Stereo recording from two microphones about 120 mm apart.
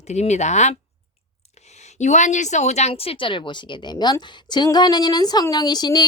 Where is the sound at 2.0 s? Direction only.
85° left.